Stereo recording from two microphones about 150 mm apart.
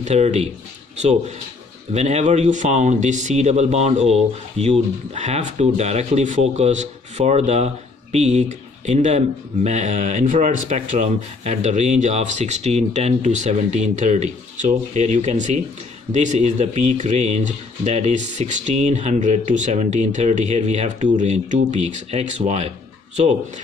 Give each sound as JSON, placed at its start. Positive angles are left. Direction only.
{"t": 0.0, "sound": "speech", "side_deg": -50}
{"t": 1.9, "sound": "a man's voice", "side_deg": -50}